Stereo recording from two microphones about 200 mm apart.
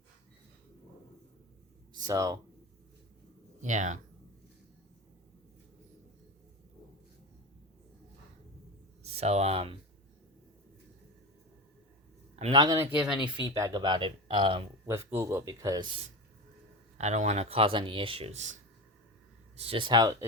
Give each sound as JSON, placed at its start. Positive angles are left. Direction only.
{"t": 1.9, "sound": "a sound", "side_deg": -20}
{"t": 3.6, "sound": "speech", "side_deg": -35}
{"t": 9.0, "sound": "speech", "side_deg": -30}
{"t": 12.5, "sound": "speech", "side_deg": -20}
{"t": 12.9, "sound": "speech", "side_deg": -5}
{"t": 14.8, "sound": "speech", "side_deg": -15}
{"t": 17.0, "sound": "speech", "side_deg": -35}
{"t": 19.5, "sound": "speech", "side_deg": -30}